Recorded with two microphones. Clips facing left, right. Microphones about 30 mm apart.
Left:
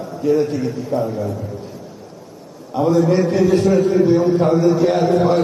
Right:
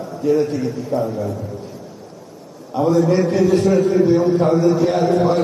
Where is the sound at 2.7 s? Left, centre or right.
Centre.